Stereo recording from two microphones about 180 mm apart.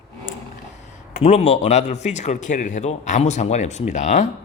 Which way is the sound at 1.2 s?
40° left (ahead or behind).